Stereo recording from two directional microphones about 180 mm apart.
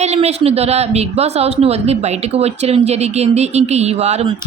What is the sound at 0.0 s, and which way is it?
A woman's voice, 35° right (ahead or behind).